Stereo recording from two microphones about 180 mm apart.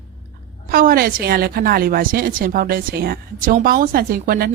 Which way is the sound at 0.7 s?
55° right (ahead or behind).